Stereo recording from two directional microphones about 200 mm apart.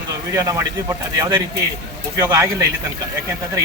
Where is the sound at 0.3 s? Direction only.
15° right (ahead or behind).